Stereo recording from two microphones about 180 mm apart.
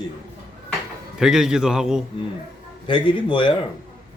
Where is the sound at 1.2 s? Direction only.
5° right (ahead or behind).